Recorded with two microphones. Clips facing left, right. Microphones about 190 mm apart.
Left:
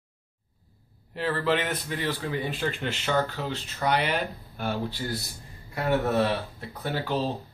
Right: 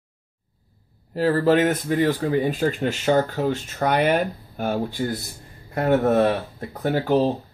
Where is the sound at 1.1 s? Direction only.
40° right (ahead or behind).